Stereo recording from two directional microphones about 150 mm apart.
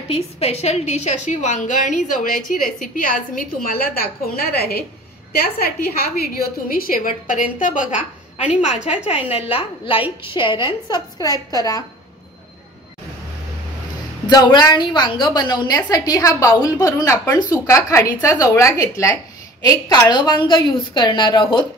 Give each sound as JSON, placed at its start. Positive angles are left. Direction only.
{"t": 0.1, "sound": "a woman's voice", "side_deg": 45}
{"t": 8.4, "sound": "a woman's voice", "side_deg": -10}
{"t": 9.3, "sound": "a woman's voice", "side_deg": 40}
{"t": 14.2, "sound": "a woman's voice", "side_deg": 30}